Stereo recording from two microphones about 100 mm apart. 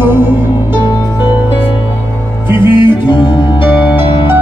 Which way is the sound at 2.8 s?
50° left (ahead or behind).